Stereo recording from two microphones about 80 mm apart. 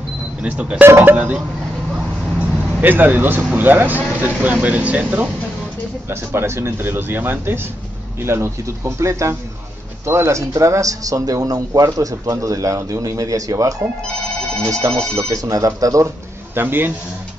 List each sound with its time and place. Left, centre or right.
0.4 s speech: centre
0.8 s speech: right
1.1 s speech: centre
2.8 s speech: right
6.0 s speech: right
15.0 s speech: right
16.5 s speech: right